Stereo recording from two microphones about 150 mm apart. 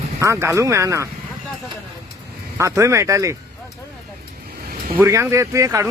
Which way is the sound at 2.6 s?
20° right (ahead or behind).